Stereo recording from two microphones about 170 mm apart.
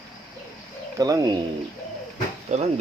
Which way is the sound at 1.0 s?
20° right (ahead or behind).